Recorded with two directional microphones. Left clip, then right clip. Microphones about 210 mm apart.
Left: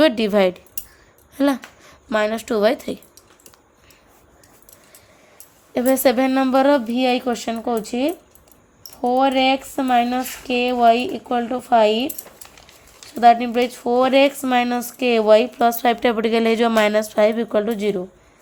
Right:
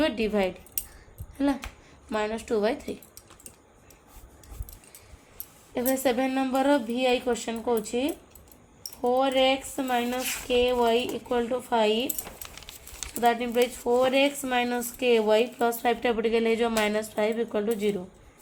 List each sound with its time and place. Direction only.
0.0 s speech: 50° left (ahead or behind)
5.7 s speech: 55° left (ahead or behind)
12.5 s a sound: 50° right (ahead or behind)
13.1 s speech: 50° left (ahead or behind)